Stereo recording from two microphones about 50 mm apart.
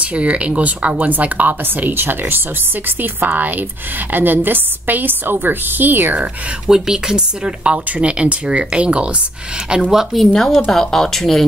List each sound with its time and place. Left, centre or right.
0.0 s a woman's voice: right
6.7 s speech: centre
10.3 s speech: centre